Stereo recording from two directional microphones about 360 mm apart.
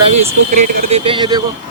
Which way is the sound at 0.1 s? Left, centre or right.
Centre.